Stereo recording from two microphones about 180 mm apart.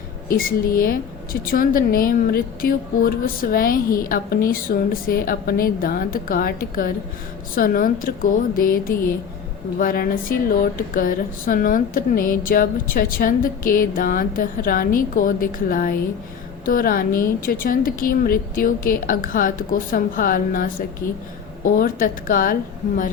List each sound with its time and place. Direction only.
0.3 s a woman's voice: 55° left (ahead or behind)